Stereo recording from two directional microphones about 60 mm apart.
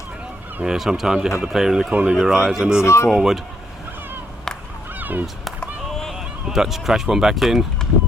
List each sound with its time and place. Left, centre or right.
0.6 s speech: centre
2.8 s speech: left
3.1 s speech: centre
4.9 s fowl: right
5.2 s a sound: centre
6.1 s speech: centre